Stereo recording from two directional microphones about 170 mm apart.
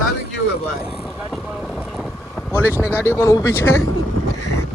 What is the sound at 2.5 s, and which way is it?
Speech, 15° left (ahead or behind).